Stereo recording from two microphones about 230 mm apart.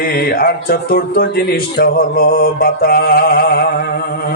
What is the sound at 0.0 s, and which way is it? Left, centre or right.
Speech, left.